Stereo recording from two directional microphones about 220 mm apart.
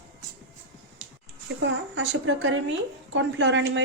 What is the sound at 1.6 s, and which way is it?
A woman's voice, 55° right (ahead or behind).